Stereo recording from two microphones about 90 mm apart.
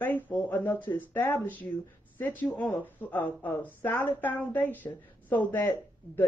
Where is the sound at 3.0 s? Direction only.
20° left (ahead or behind).